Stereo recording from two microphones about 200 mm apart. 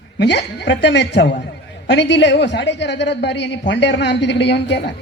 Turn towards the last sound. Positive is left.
turn(degrees=60)  # may be behind; listen again after turning